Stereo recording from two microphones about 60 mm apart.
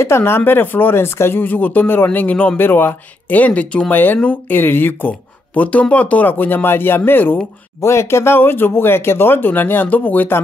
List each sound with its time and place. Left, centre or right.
0.0 s speech: left
0.5 s speech: left
2.6 s speech: left
7.8 s speech: left